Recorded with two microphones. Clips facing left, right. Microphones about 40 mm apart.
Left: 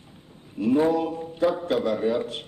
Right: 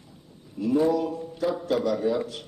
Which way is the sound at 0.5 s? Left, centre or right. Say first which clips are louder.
Left 2 dB; left.